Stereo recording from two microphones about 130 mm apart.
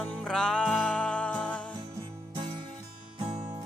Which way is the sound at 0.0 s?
5° left (ahead or behind).